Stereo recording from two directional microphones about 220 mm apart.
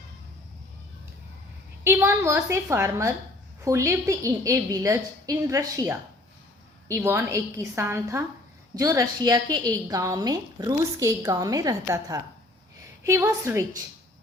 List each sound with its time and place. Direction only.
1.8 s a woman's voice: 10° right (ahead or behind)